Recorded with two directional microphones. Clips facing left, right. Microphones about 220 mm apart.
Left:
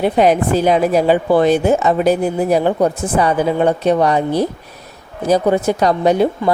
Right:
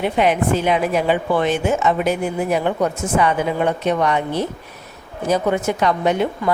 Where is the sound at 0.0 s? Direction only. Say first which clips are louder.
Left 4 dB; 40° left (ahead or behind).